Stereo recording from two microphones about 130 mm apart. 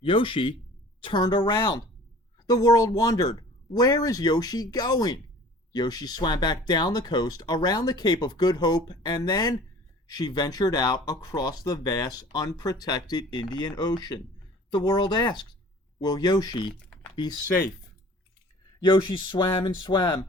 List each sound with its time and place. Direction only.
0.0 s speech: 40° left (ahead or behind)
18.8 s speech: 35° left (ahead or behind)